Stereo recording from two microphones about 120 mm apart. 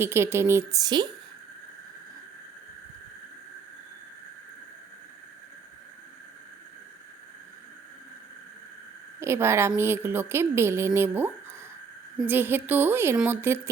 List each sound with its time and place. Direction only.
0.0 s a woman's voice: 20° right (ahead or behind)
9.2 s a woman's voice: 20° right (ahead or behind)